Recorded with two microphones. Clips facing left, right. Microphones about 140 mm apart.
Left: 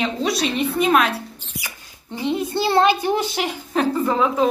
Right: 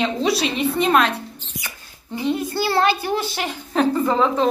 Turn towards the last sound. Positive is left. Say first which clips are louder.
# even
turn(degrees=5)  # may be behind; listen again after turning